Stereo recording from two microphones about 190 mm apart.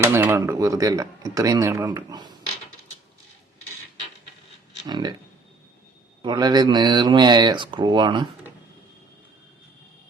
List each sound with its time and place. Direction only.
0.0 s speech: 10° right (ahead or behind)
4.9 s speech: 20° right (ahead or behind)
6.2 s speech: 20° right (ahead or behind)